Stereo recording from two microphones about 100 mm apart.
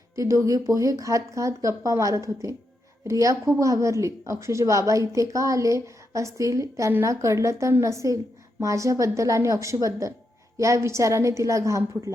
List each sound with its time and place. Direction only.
0.2 s speech: 35° right (ahead or behind)